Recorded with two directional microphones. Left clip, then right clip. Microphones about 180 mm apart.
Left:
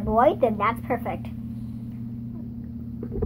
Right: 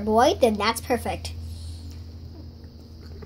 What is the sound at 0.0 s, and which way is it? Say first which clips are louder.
A woman's voice: right 1 dB; 60° right (ahead or behind).